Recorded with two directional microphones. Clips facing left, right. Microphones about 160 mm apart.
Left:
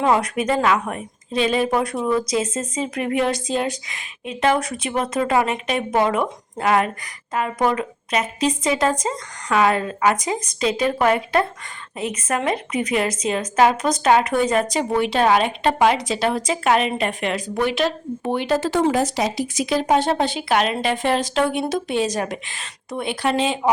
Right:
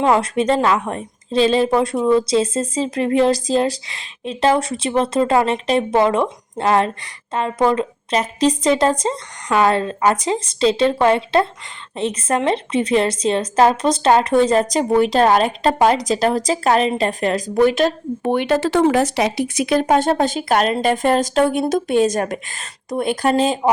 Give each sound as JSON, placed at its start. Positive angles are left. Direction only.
{"t": 0.0, "sound": "a woman's voice", "side_deg": -25}